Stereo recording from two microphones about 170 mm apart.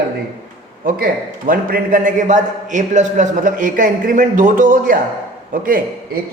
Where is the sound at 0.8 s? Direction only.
55° right (ahead or behind).